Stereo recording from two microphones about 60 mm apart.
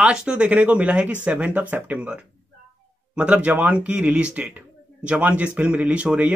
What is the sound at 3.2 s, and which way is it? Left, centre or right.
Speech, right.